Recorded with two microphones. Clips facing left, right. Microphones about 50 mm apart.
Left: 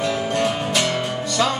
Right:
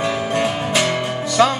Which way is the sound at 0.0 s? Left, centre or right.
Centre.